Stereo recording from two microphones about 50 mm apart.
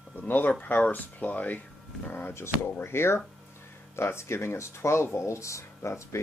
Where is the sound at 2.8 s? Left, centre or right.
Left.